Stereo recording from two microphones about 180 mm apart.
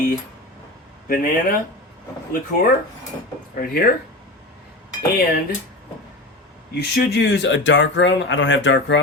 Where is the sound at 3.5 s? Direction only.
55° left (ahead or behind).